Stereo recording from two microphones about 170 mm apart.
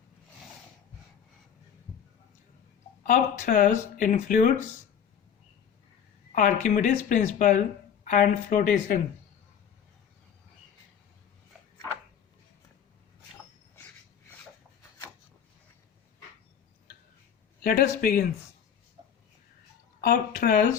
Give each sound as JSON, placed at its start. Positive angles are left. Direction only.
{"t": 3.0, "sound": "speech", "side_deg": 50}
{"t": 6.3, "sound": "speech", "side_deg": 55}
{"t": 17.6, "sound": "speech", "side_deg": 60}
{"t": 20.1, "sound": "speech", "side_deg": 55}